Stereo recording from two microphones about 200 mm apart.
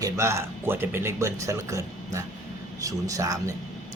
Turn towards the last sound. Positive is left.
turn(degrees=-15)  # may be behind; listen again after turning